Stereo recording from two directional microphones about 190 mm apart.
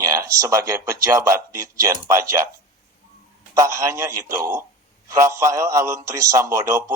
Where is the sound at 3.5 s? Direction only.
15° right (ahead or behind).